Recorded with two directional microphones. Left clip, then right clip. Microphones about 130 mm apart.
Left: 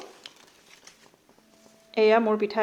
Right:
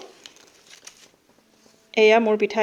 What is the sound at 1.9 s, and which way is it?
Speech, 40° right (ahead or behind).